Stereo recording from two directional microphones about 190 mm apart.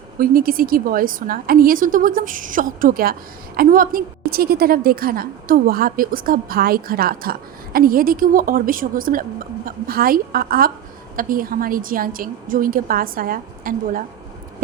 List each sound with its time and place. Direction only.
0.2 s a woman's voice: 50° right (ahead or behind)